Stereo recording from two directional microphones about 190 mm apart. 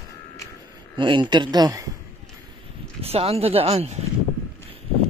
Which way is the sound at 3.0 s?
30° right (ahead or behind).